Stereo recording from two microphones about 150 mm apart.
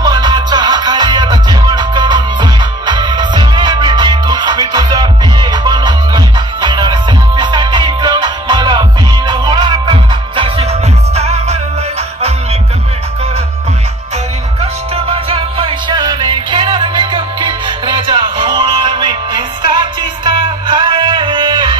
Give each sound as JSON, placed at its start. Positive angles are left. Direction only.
{"t": 0.0, "sound": "music", "side_deg": -30}
{"t": 14.6, "sound": "music", "side_deg": -40}